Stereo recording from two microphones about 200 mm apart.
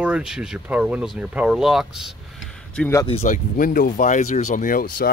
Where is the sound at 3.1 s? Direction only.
35° left (ahead or behind).